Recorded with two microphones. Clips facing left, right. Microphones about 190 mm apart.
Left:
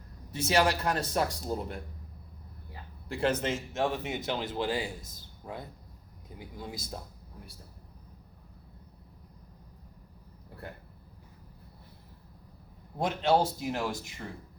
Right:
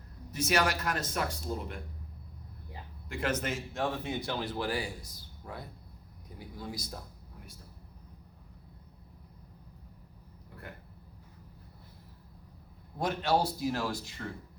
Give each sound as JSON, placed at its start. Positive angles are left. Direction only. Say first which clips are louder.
{"t": 0.3, "sound": "speech", "louder": "left 3 dB", "side_deg": 30}
{"t": 3.1, "sound": "speech", "louder": "left 4 dB", "side_deg": 30}
{"t": 13.0, "sound": "speech", "louder": "left 3 dB", "side_deg": 25}